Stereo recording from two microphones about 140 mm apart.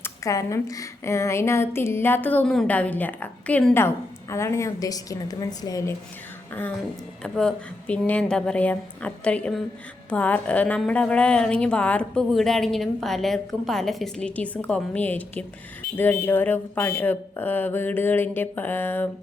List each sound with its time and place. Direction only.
0.0 s speech: 20° left (ahead or behind)
6.5 s a sound: 15° left (ahead or behind)
7.2 s speech: 5° left (ahead or behind)